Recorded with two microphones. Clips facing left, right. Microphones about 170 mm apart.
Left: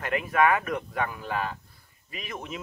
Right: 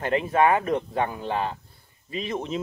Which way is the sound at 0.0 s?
30° right (ahead or behind).